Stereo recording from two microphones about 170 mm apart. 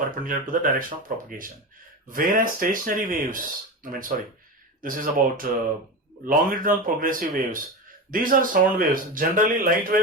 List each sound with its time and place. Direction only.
0.0 s speech: 55° right (ahead or behind)